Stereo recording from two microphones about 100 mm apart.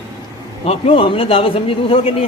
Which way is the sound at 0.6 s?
75° left (ahead or behind).